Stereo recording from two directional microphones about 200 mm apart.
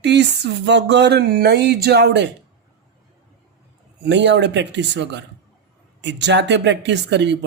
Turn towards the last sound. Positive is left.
turn(degrees=-60)  # may be behind; listen again after turning